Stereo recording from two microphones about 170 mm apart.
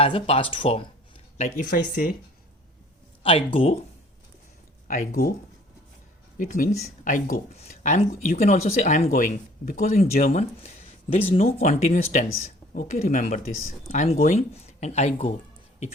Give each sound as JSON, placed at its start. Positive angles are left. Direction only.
{"t": 0.0, "sound": "speech", "side_deg": 30}
{"t": 1.9, "sound": "speech", "side_deg": 55}
{"t": 3.2, "sound": "speech", "side_deg": 35}
{"t": 4.9, "sound": "speech", "side_deg": 55}
{"t": 6.3, "sound": "speech", "side_deg": 55}